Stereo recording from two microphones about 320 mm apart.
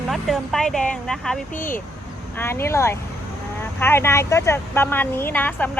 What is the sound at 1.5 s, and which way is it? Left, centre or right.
Speech, left.